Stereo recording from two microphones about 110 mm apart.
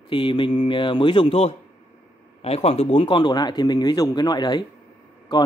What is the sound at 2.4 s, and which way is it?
Speech, 65° left (ahead or behind).